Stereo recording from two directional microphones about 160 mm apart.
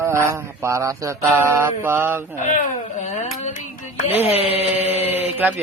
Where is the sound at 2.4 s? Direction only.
50° left (ahead or behind).